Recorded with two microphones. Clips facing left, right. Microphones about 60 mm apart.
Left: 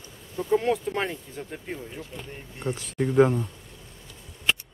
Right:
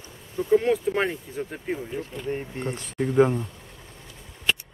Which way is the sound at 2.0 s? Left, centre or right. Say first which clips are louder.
Right 9 dB; right.